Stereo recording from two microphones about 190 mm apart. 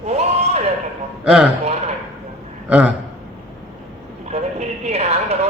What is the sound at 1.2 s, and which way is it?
Speech, 5° right (ahead or behind).